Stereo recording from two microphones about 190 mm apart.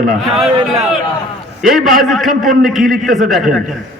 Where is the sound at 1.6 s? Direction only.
Centre (ahead or behind).